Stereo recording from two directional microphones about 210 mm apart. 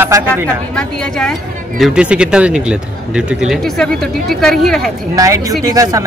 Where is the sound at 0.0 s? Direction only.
10° right (ahead or behind).